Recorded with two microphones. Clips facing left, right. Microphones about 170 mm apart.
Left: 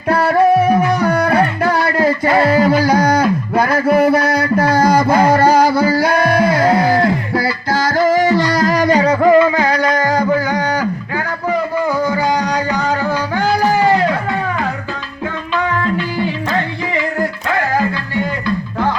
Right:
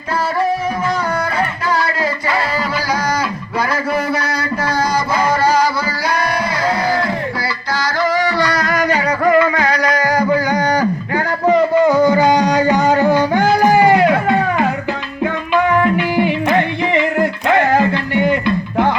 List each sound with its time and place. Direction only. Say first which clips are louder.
0.1 s music: left 6 dB; 60° left (ahead or behind); by 10.2 s 25° left (ahead or behind)
10.6 s a sound: right 2 dB; 15° right (ahead or behind)
15.2 s tabla: right 4 dB; 15° right (ahead or behind)
16.1 s music: right 4 dB; 20° right (ahead or behind)